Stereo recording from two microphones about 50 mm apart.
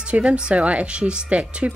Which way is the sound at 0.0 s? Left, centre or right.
Right.